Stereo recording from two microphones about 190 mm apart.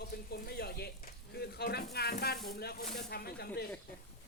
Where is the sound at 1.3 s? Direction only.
55° left (ahead or behind).